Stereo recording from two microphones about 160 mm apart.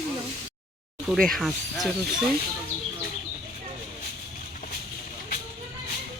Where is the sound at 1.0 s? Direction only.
Centre (ahead or behind).